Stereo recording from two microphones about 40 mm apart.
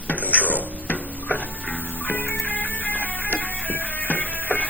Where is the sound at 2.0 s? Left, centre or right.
Left.